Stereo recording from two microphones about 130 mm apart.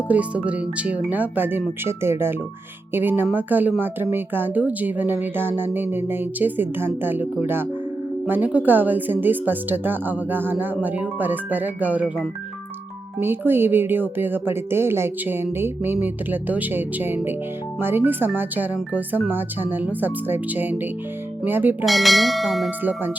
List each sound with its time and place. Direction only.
0.1 s speech: 10° right (ahead or behind)
21.8 s speech: centre (ahead or behind)
22.8 s speech: 15° right (ahead or behind)